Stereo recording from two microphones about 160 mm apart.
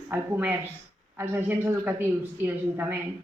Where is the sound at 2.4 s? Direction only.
10° right (ahead or behind).